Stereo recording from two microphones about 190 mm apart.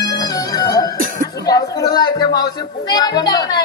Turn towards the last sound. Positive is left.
turn(degrees=20)  # may be behind; listen again after turning